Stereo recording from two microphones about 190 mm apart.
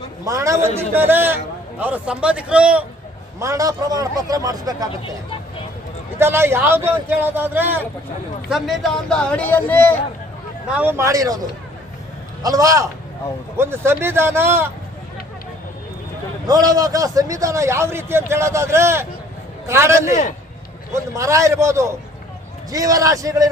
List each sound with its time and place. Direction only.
0.3 s a man's voice: 15° right (ahead or behind)
3.4 s a man's voice: 15° right (ahead or behind)
6.1 s a man's voice: 10° right (ahead or behind); by 10.0 s 10° left (ahead or behind)
10.7 s a man's voice: 10° right (ahead or behind)
12.4 s a man's voice: 20° right (ahead or behind)
16.5 s a man's voice: 20° right (ahead or behind)